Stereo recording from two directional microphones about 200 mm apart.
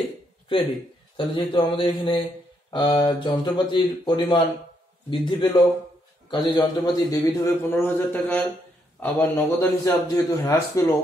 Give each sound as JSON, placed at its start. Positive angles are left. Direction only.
{"t": 0.5, "sound": "a man's voice", "side_deg": 20}